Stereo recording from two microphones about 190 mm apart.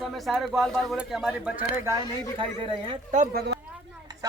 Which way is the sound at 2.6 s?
30° right (ahead or behind).